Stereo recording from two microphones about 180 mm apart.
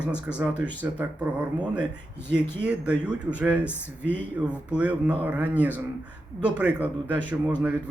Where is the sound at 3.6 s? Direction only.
10° left (ahead or behind).